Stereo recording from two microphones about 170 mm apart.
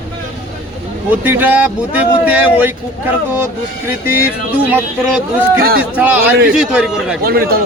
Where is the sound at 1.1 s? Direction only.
10° right (ahead or behind).